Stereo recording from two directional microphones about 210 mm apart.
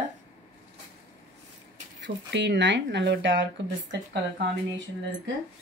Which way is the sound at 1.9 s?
55° right (ahead or behind).